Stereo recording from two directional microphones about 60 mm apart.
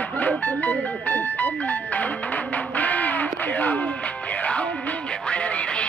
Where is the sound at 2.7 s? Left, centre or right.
Left.